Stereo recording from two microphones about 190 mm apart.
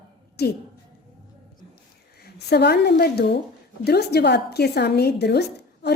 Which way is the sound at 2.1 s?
55° left (ahead or behind).